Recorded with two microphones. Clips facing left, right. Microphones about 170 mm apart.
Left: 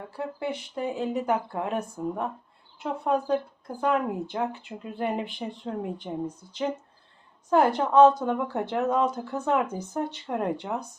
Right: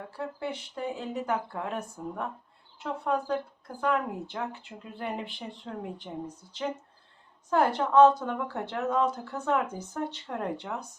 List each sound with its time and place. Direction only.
0.2 s speech: 15° left (ahead or behind)